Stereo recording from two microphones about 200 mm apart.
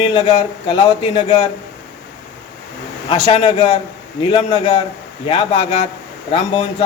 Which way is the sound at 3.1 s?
25° left (ahead or behind).